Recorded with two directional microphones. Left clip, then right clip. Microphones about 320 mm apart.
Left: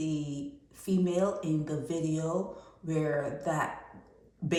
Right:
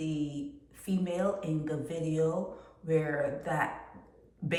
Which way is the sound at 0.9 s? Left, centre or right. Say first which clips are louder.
Left 2 dB; centre.